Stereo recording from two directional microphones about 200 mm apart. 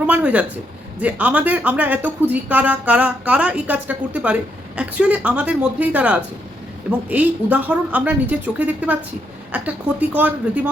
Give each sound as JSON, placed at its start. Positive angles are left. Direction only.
{"t": 0.0, "sound": "speech", "side_deg": -5}